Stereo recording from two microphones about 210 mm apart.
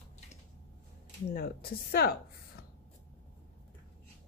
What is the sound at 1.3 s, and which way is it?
Speech, 45° left (ahead or behind).